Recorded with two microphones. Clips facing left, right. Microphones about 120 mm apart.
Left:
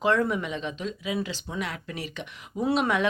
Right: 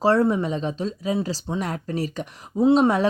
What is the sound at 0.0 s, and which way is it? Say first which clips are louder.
Speech: right 5 dB; 35° right (ahead or behind).